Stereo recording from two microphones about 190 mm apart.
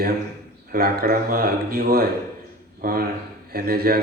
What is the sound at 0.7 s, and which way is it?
A man's voice, 55° right (ahead or behind).